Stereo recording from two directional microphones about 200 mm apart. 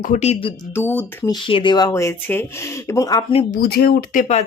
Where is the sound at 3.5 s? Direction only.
50° left (ahead or behind).